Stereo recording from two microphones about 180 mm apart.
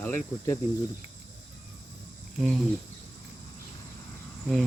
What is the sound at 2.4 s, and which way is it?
Speech, centre (ahead or behind).